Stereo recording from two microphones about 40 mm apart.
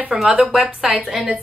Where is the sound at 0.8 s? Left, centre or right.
Centre.